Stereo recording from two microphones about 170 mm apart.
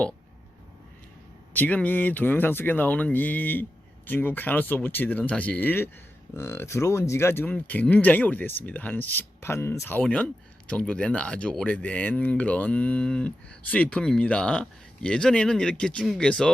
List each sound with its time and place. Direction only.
1.5 s speech: 10° left (ahead or behind)